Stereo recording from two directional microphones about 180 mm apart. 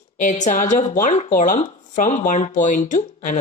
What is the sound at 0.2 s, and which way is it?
Speech, 40° left (ahead or behind).